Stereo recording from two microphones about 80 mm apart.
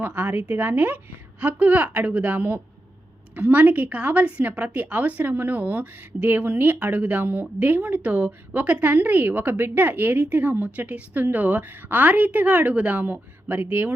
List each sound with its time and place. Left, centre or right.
0.0 s a woman's voice: right